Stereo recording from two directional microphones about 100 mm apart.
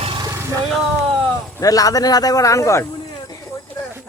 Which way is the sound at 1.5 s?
35° left (ahead or behind).